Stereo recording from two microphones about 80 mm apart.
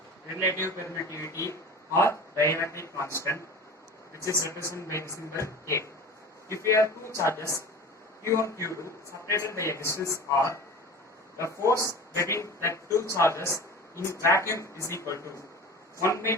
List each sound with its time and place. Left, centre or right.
1.1 s speech: left